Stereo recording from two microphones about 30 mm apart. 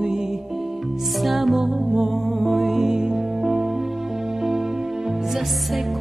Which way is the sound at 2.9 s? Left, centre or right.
Right.